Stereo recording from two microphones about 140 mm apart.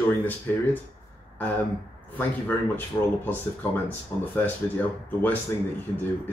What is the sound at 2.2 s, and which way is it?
Speech, 15° left (ahead or behind).